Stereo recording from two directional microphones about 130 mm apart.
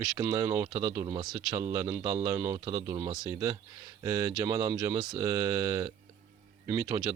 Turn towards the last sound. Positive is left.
turn(degrees=-25)  # may be behind; listen again after turning